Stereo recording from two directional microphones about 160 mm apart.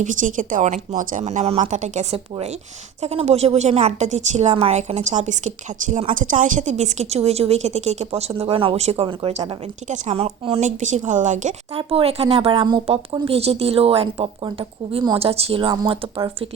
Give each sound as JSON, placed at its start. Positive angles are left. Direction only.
{"t": 0.0, "sound": "a woman's voice", "side_deg": -55}
{"t": 11.8, "sound": "speech", "side_deg": -35}